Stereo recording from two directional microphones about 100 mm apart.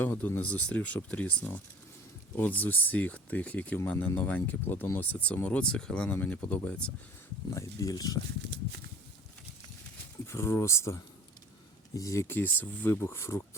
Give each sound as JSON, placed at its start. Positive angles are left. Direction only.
{"t": 0.0, "sound": "speech", "side_deg": 20}
{"t": 7.5, "sound": "speech", "side_deg": 30}
{"t": 10.2, "sound": "speech", "side_deg": 25}